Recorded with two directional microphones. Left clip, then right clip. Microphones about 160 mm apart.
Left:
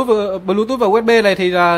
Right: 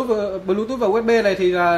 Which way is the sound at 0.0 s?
40° left (ahead or behind).